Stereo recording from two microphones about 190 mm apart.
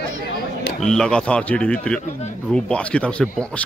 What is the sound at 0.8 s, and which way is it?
Speech, 5° left (ahead or behind).